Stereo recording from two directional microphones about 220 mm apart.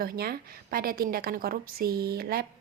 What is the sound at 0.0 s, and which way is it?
A woman's voice, 45° right (ahead or behind).